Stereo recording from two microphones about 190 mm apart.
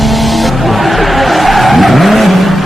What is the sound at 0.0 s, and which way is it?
Vehicle, centre (ahead or behind).